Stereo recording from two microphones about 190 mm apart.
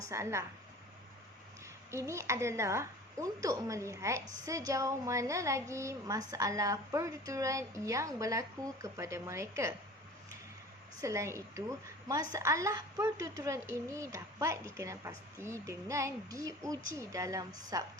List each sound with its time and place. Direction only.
0.1 s a woman's voice: 15° right (ahead or behind)
1.9 s a woman's voice: 15° right (ahead or behind)
11.0 s a woman's voice: 15° right (ahead or behind)